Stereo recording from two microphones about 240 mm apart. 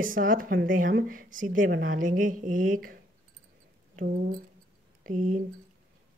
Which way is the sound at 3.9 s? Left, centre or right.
Right.